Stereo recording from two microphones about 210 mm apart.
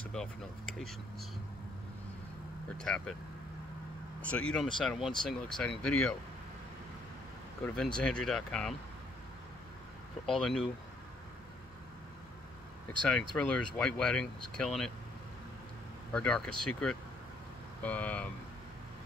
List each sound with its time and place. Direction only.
0.1 s speech: centre (ahead or behind)
2.8 s speech: 5° left (ahead or behind)
4.2 s speech: 5° left (ahead or behind)
7.6 s speech: 5° left (ahead or behind)
10.2 s speech: centre (ahead or behind)
13.0 s speech: 5° left (ahead or behind)
16.1 s speech: 5° left (ahead or behind)
17.8 s speech: 5° left (ahead or behind)